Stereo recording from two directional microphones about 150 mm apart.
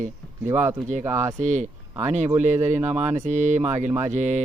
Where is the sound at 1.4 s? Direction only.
55° right (ahead or behind).